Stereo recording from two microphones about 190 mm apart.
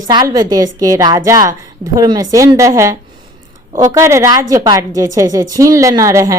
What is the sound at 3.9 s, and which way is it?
A woman's voice, 15° right (ahead or behind).